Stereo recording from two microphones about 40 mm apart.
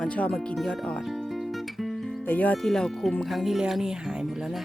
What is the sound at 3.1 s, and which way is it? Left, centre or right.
Speech, centre.